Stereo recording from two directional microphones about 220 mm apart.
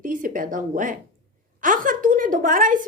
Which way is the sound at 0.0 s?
40° right (ahead or behind).